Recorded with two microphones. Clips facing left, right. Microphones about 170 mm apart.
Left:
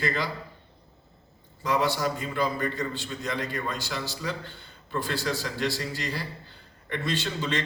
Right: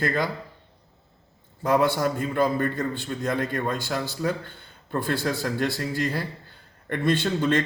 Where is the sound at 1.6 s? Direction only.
55° right (ahead or behind).